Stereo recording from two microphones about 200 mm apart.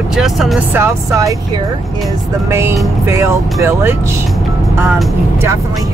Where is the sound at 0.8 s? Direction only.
15° right (ahead or behind).